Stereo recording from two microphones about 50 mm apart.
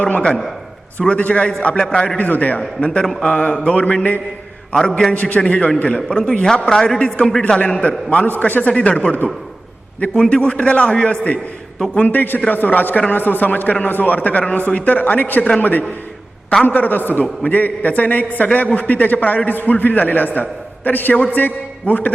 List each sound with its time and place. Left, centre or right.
0.0 s a man's voice: left
2.1 s a man's voice: left
2.8 s a man's voice: left
11.9 s a man's voice: left
16.6 s a man's voice: left